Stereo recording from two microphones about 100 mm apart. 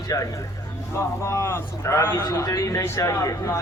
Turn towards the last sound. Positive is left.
turn(degrees=35)  # may be behind; listen again after turning